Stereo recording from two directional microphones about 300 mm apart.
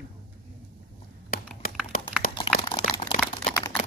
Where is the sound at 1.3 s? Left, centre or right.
Left.